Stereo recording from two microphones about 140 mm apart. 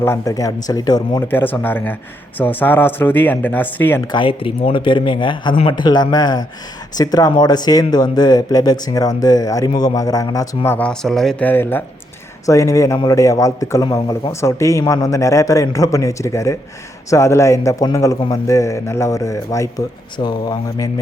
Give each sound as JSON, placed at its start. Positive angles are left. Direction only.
{"t": 0.0, "sound": "speech", "side_deg": 20}
{"t": 1.3, "sound": "speech", "side_deg": 15}
{"t": 4.0, "sound": "speech", "side_deg": 35}